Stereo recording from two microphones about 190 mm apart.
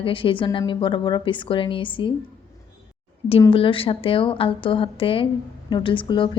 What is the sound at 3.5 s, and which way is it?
A woman's voice, 30° left (ahead or behind).